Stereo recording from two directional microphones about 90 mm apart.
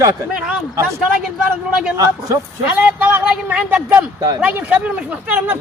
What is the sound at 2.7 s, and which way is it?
Speech, 15° right (ahead or behind).